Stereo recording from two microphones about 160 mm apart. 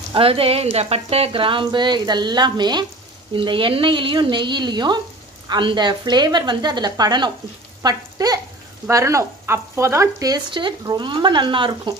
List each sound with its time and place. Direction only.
0.1 s speech: 35° right (ahead or behind)
7.8 s frying: 25° right (ahead or behind)
8.8 s speech: 20° right (ahead or behind)